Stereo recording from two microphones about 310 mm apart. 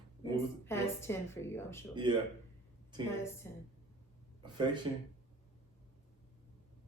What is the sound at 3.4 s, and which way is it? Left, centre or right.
Speech, centre.